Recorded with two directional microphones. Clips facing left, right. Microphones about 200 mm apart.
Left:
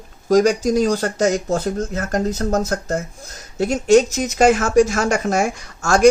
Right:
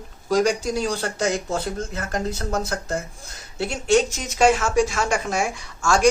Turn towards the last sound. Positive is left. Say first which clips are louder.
# left 3 dB
turn(degrees=40)  # may be behind; listen again after turning